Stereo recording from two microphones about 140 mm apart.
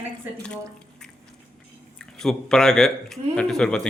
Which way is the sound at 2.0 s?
5° left (ahead or behind).